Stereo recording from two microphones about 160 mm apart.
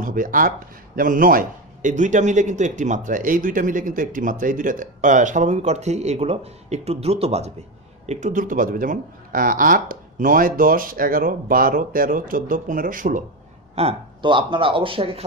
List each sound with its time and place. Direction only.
0.0 s a man's voice: 60° right (ahead or behind)
13.7 s speech: 35° right (ahead or behind)